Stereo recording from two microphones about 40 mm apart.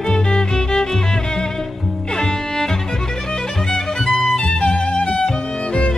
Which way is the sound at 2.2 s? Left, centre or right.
Centre.